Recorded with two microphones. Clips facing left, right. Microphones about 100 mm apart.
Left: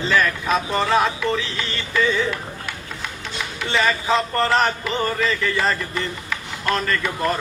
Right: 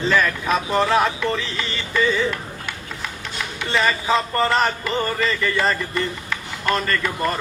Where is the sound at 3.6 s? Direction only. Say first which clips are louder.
Even; centre (ahead or behind).